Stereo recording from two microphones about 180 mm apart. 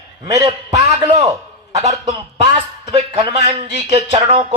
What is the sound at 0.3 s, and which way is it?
Speech, 20° right (ahead or behind).